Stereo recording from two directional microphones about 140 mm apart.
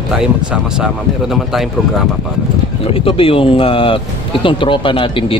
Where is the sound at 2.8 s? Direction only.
40° left (ahead or behind).